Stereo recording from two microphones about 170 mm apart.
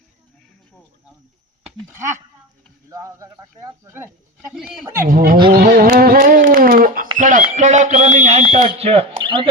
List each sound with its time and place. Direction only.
1.9 s speech: 15° right (ahead or behind)
4.5 s speech: 5° right (ahead or behind)
5.0 s speech: 55° right (ahead or behind)
7.5 s a sound: 45° right (ahead or behind)
8.5 s speech: 40° right (ahead or behind)